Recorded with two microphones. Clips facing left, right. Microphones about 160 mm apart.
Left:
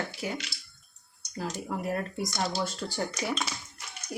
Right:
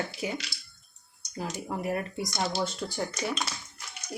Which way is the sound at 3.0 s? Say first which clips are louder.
Left 1 dB; centre (ahead or behind).